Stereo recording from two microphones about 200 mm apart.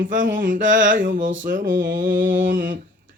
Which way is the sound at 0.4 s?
40° right (ahead or behind).